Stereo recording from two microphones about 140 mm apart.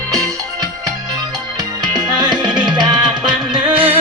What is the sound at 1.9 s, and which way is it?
Music, 30° right (ahead or behind).